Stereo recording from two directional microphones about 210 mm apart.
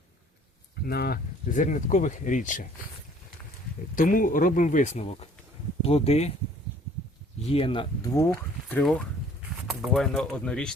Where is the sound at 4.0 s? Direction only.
40° left (ahead or behind).